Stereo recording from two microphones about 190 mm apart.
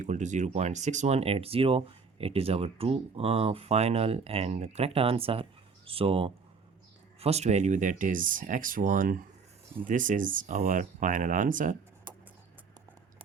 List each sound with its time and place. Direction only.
0.0 s speech: 40° right (ahead or behind)